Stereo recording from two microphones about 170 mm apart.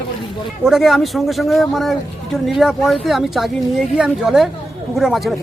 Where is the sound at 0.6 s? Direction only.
Centre (ahead or behind).